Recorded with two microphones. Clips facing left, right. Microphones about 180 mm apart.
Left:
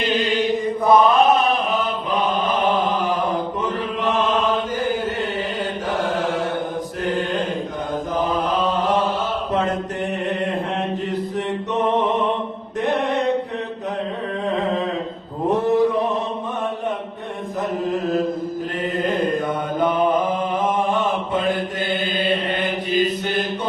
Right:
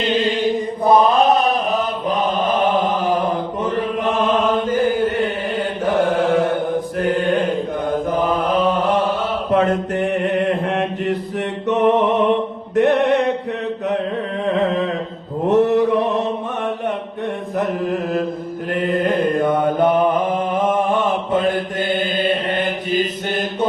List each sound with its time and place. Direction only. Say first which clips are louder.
0.0 s chant: right 2 dB; 30° right (ahead or behind); by 6.5 s 55° right (ahead or behind)
7.0 s mantra: right 4 dB; 60° right (ahead or behind)
8.2 s chant: right 2 dB; 60° right (ahead or behind)
9.5 s mantra: right 8 dB; 60° right (ahead or behind)
12.7 s mantra: right 7 dB; 75° right (ahead or behind)
15.5 s mantra: right 4 dB; 65° right (ahead or behind)
18.8 s mantra: right 4 dB; 60° right (ahead or behind)